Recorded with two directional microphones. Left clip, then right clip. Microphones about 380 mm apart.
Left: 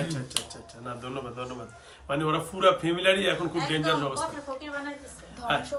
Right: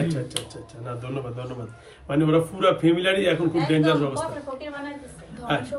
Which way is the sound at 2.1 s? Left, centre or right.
Centre.